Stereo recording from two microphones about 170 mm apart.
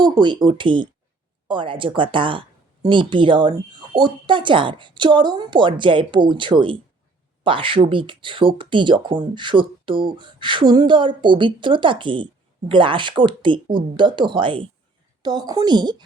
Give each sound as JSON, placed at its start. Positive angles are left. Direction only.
{"t": 0.0, "sound": "speech", "side_deg": -25}